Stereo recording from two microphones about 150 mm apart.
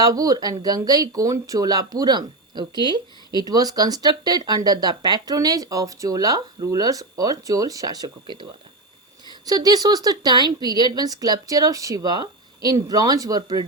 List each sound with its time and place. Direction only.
0.0 s speech: 25° right (ahead or behind)